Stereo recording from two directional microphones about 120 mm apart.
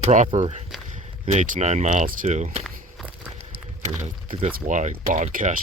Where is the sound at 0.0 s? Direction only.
90° right.